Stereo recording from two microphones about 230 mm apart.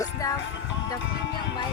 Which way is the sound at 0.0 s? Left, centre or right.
Centre.